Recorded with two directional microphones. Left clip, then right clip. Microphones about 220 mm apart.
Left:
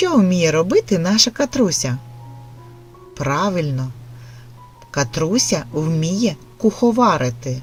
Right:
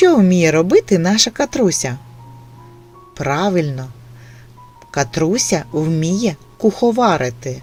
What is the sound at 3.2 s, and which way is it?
Speech, 25° right (ahead or behind).